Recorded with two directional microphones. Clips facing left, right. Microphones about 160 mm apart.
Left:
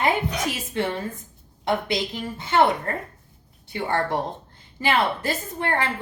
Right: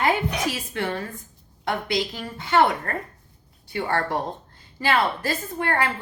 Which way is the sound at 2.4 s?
20° left (ahead or behind).